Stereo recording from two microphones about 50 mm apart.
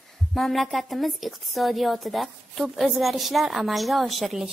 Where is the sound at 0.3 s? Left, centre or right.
Centre.